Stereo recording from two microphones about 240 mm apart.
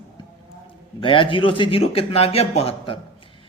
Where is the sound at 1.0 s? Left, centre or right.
Left.